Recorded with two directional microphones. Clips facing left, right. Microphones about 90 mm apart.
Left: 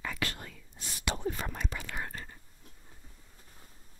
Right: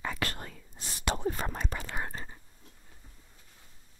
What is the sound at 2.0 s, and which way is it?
Whispering, 25° right (ahead or behind).